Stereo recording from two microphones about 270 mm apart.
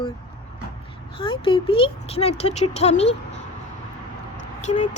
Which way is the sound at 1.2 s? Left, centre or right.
Centre.